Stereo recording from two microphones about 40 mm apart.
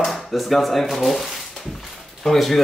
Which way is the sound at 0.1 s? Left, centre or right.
Centre.